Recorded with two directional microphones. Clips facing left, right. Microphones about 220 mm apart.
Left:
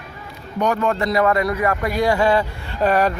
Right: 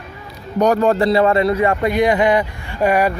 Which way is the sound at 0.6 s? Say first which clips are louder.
Right 6 dB; 35° right (ahead or behind).